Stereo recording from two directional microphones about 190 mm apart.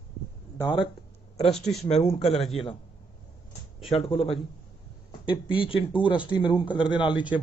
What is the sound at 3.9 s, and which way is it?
A man's voice, 30° left (ahead or behind).